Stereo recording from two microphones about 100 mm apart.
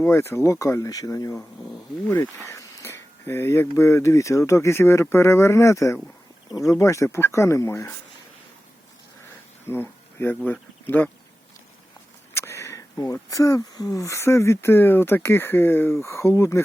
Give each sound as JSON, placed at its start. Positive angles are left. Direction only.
{"t": 0.0, "sound": "speech", "side_deg": 25}
{"t": 2.0, "sound": "speech", "side_deg": 20}
{"t": 9.6, "sound": "a sound", "side_deg": 25}
{"t": 10.4, "sound": "speech", "side_deg": 15}
{"t": 12.3, "sound": "speech", "side_deg": 25}